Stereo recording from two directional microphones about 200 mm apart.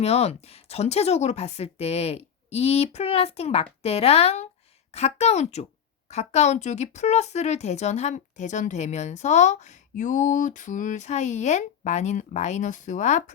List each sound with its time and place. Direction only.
0.0 s a woman's voice: 30° left (ahead or behind)